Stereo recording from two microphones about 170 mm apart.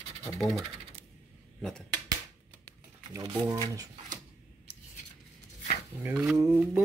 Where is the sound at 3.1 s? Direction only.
20° right (ahead or behind).